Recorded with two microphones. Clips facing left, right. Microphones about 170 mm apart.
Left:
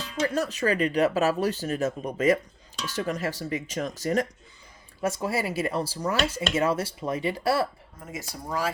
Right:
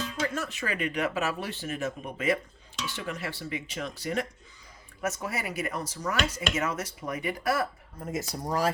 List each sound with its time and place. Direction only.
0.2 s speech: 35° left (ahead or behind)
4.9 s speech: 30° left (ahead or behind)
8.4 s speech: 40° right (ahead or behind)